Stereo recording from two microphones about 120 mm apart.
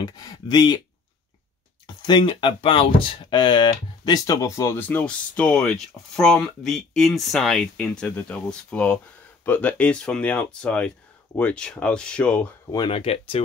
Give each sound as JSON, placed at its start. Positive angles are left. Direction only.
{"t": 0.0, "sound": "speech", "side_deg": 35}
{"t": 2.0, "sound": "speech", "side_deg": 40}
{"t": 4.7, "sound": "speech", "side_deg": 15}
{"t": 12.9, "sound": "speech", "side_deg": 50}